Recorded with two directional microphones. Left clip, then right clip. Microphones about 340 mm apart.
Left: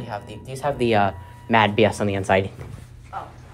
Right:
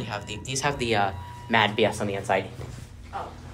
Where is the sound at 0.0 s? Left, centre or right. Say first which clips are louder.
Left 1 dB; centre.